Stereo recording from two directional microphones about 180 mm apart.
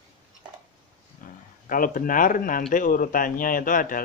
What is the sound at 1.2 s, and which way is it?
Speech, 50° left (ahead or behind).